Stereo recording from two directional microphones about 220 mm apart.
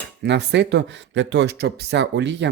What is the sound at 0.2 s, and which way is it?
Speech, 50° right (ahead or behind).